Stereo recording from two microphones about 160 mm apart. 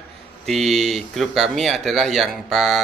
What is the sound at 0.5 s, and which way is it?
A man's voice, centre (ahead or behind).